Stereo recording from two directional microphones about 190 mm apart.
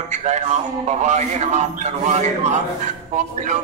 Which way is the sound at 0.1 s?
35° right (ahead or behind).